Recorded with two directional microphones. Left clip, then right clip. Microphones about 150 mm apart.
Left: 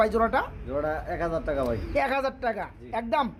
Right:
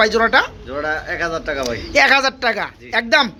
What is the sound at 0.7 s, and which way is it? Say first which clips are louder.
Speech: right 6 dB; 50° left (ahead or behind).